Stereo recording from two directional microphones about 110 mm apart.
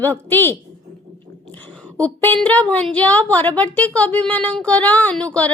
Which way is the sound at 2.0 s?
15° left (ahead or behind).